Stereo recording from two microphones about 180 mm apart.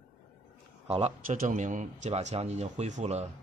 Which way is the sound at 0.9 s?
35° right (ahead or behind).